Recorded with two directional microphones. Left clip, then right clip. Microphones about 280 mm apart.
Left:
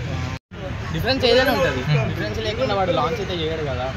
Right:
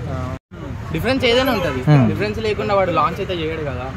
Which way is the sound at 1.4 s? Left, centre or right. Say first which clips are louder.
Even; right.